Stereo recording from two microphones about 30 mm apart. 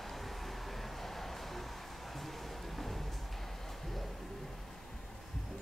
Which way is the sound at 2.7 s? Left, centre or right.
Centre.